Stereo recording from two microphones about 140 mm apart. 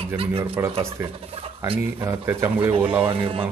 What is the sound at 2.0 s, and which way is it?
Speech, 20° right (ahead or behind).